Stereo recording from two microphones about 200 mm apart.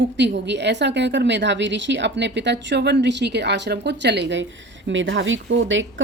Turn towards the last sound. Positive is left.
turn(degrees=-70)  # may be behind; listen again after turning